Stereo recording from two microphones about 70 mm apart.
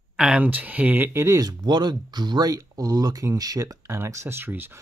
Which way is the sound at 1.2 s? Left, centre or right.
Right.